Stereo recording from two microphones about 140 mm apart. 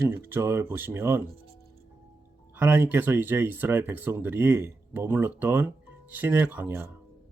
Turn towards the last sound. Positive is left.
turn(degrees=-15)  # may be behind; listen again after turning